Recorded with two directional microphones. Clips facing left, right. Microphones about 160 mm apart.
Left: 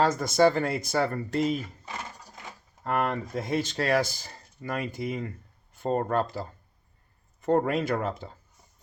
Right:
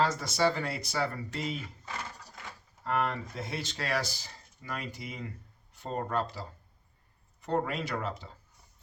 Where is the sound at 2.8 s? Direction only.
50° left (ahead or behind).